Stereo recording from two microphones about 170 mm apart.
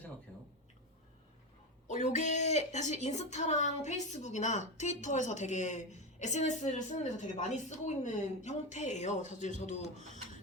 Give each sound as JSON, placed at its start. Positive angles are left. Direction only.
{"t": 1.9, "sound": "a woman's voice", "side_deg": 45}